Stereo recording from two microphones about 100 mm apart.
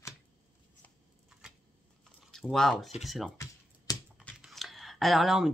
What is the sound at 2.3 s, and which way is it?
Speech, 5° left (ahead or behind).